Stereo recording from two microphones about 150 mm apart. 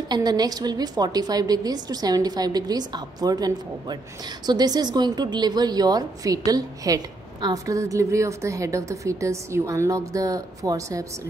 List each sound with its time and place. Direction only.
0.1 s a woman's voice: 25° right (ahead or behind)